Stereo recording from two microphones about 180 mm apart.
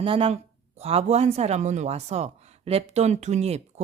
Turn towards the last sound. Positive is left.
turn(degrees=-35)  # may be behind; listen again after turning